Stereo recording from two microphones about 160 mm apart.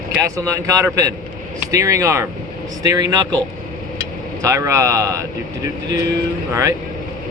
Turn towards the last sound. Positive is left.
turn(degrees=-20)  # may be behind; listen again after turning